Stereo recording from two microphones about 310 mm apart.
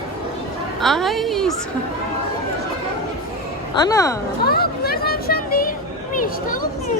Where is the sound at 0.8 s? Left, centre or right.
Centre.